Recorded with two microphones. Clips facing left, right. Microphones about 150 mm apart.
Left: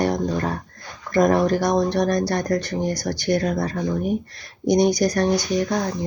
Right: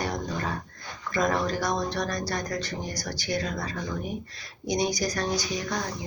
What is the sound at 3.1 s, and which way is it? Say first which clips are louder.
Speech: left 8 dB; 60° left (ahead or behind).